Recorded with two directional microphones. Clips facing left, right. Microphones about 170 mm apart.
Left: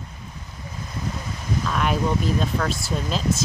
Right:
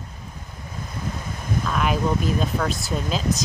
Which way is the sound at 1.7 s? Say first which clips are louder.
Even; centre (ahead or behind).